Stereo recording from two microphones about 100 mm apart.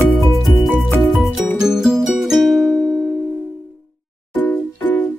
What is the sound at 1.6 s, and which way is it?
Music, 5° right (ahead or behind).